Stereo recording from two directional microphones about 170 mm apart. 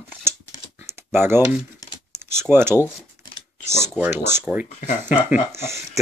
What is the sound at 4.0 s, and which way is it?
Speech, 15° right (ahead or behind).